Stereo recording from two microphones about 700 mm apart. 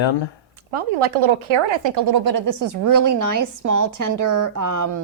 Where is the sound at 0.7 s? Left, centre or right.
Right.